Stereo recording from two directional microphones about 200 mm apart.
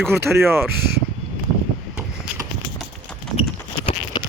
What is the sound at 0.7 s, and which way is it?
Speech, 55° right (ahead or behind).